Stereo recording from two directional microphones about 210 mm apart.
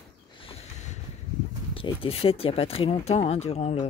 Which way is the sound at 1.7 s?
25° left (ahead or behind).